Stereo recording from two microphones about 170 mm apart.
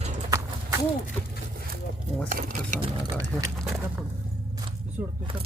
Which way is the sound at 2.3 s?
45° right (ahead or behind).